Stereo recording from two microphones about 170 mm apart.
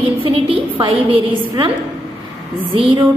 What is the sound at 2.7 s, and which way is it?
Speech, 30° right (ahead or behind).